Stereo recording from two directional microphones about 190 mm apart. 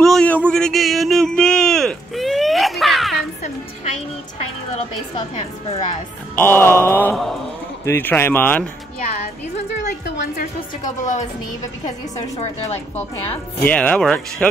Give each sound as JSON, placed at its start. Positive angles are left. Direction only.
{"t": 0.0, "sound": "a sound", "side_deg": 5}
{"t": 5.3, "sound": "speech", "side_deg": 40}
{"t": 6.3, "sound": "speech", "side_deg": 10}
{"t": 10.0, "sound": "a woman's voice", "side_deg": 55}
{"t": 12.4, "sound": "speech", "side_deg": 35}
{"t": 13.6, "sound": "speech", "side_deg": 5}